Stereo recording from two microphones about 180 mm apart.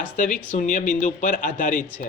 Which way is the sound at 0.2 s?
45° left (ahead or behind).